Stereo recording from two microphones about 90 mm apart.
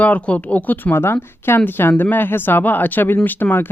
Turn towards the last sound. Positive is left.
turn(degrees=20)  # may be behind; listen again after turning